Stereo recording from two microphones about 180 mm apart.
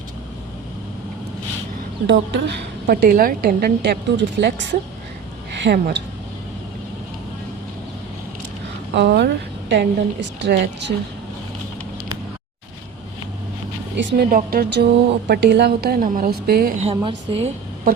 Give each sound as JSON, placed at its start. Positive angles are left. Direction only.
{"t": 2.0, "sound": "a woman's voice", "side_deg": -70}
{"t": 9.0, "sound": "a woman's voice", "side_deg": -65}
{"t": 13.9, "sound": "a woman's voice", "side_deg": -75}
{"t": 16.8, "sound": "a woman's voice", "side_deg": -30}